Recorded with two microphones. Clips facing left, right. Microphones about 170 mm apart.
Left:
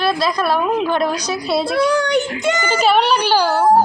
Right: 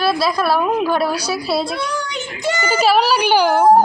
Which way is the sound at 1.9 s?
80° left.